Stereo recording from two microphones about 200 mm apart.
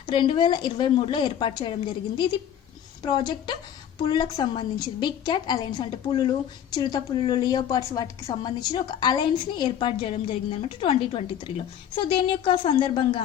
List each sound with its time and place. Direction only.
0.0 s a woman's voice: 25° left (ahead or behind)